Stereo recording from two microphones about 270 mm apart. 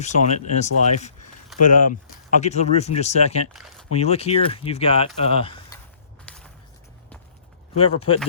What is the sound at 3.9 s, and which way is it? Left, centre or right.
Speech, left.